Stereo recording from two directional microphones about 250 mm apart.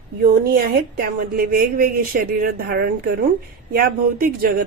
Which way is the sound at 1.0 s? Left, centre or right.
Right.